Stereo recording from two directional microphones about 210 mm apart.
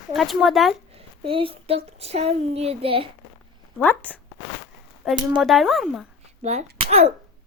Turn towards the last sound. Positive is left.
turn(degrees=-35)  # may be behind; listen again after turning